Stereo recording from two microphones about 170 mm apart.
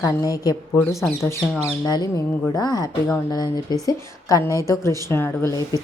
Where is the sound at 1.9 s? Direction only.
25° left (ahead or behind).